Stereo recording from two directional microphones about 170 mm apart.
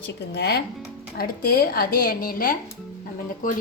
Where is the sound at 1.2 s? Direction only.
60° left (ahead or behind).